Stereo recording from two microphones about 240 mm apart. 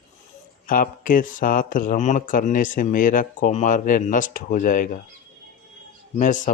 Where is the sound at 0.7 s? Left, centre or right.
Left.